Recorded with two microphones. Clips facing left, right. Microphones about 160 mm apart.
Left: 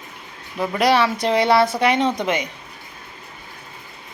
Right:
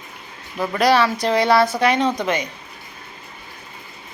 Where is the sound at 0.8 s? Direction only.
25° left (ahead or behind).